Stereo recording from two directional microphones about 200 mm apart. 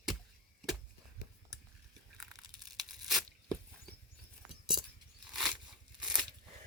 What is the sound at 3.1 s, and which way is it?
Tearing, centre (ahead or behind).